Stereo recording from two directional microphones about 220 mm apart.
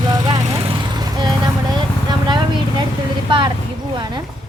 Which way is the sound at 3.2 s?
20° right (ahead or behind).